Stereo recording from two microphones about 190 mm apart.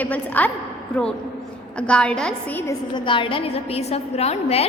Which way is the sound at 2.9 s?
25° left (ahead or behind).